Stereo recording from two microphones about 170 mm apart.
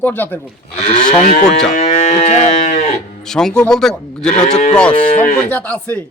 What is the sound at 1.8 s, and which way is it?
Cattle, 40° left (ahead or behind).